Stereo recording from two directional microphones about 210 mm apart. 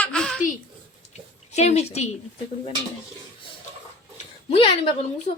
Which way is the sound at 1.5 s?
30° left (ahead or behind).